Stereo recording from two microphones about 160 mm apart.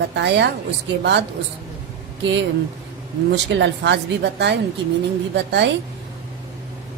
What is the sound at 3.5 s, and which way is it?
A woman's voice, 90° right.